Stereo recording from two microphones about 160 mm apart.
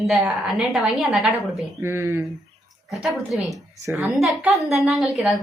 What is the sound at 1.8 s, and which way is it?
Speech, 15° right (ahead or behind).